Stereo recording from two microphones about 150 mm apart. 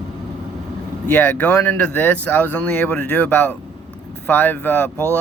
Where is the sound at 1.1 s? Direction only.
15° left (ahead or behind).